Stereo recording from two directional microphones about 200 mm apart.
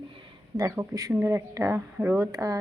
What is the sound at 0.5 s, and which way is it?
Speech, 15° right (ahead or behind).